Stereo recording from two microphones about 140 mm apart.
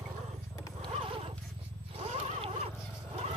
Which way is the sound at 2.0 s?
45° right (ahead or behind).